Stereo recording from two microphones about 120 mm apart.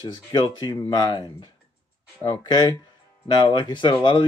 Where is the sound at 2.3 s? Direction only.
35° left (ahead or behind).